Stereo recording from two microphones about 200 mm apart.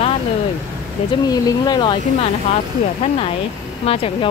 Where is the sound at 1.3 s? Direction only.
20° left (ahead or behind).